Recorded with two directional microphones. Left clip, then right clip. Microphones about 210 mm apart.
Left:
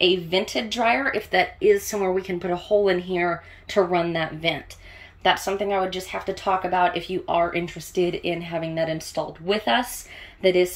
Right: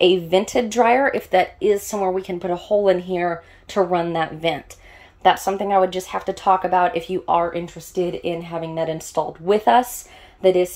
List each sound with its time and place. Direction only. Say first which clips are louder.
0.0 s speech: right 4 dB; 15° right (ahead or behind)